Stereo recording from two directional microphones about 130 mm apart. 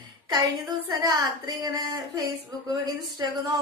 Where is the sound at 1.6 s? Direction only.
30° right (ahead or behind).